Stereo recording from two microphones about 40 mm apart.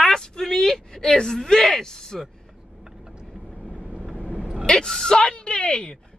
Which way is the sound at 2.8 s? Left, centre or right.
Centre.